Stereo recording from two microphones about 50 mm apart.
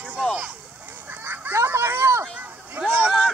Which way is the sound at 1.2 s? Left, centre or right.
Right.